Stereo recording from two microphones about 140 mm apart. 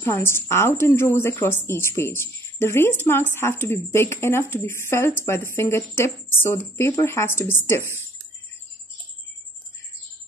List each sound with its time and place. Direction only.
0.0 s a woman's voice: 20° left (ahead or behind)